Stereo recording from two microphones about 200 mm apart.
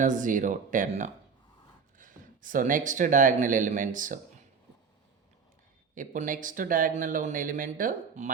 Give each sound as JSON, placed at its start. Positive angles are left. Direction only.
{"t": 0.0, "sound": "speech", "side_deg": -40}
{"t": 5.9, "sound": "speech", "side_deg": -40}